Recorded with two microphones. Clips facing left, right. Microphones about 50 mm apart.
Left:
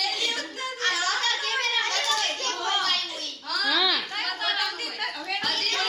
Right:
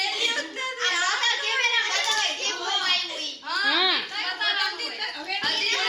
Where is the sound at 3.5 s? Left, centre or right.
Centre.